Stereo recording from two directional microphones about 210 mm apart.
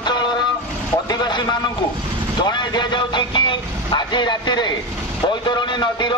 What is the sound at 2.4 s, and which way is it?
A man's voice, 20° left (ahead or behind).